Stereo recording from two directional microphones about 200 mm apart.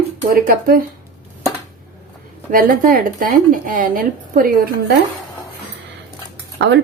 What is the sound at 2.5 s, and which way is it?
Speech, 45° right (ahead or behind).